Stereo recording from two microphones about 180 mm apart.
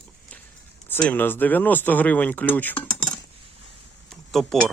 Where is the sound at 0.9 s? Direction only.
10° left (ahead or behind).